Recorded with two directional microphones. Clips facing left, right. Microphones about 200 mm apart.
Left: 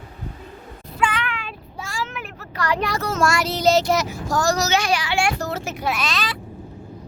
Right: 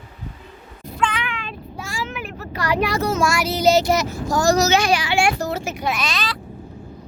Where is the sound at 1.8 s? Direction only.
5° right (ahead or behind).